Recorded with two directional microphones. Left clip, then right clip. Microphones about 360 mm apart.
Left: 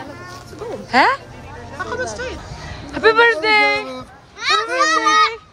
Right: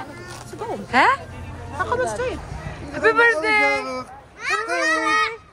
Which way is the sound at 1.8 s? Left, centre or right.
Centre.